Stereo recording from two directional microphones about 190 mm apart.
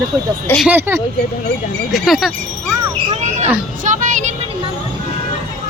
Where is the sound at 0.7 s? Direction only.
10° right (ahead or behind).